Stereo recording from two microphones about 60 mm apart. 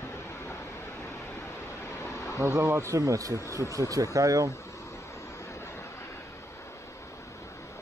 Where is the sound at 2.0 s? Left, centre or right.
Left.